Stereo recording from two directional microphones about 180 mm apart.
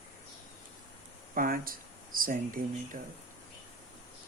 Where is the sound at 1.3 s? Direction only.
50° right (ahead or behind).